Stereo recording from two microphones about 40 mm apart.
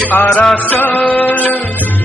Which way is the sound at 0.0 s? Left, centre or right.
Left.